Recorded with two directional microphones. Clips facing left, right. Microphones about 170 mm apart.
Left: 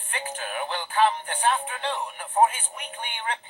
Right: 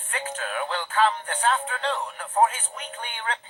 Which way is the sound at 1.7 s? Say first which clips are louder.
Right 2 dB; 15° left (ahead or behind).